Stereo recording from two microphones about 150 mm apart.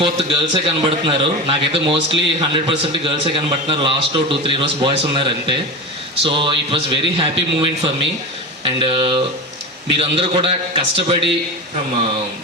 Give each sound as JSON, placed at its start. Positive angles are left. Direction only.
{"t": 0.0, "sound": "a man's voice", "side_deg": -40}